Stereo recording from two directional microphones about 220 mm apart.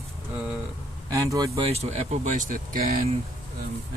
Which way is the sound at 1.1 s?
15° right (ahead or behind).